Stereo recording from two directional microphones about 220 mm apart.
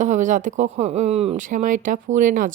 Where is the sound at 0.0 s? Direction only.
35° right (ahead or behind).